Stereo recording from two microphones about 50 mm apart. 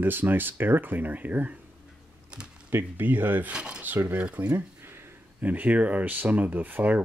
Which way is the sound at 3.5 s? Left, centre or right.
Right.